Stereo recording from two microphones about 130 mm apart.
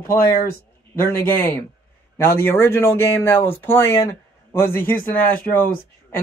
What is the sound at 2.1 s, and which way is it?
Speech, 20° left (ahead or behind).